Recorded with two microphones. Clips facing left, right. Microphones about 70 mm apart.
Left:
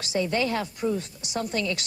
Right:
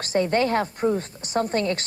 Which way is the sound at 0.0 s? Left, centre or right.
Right.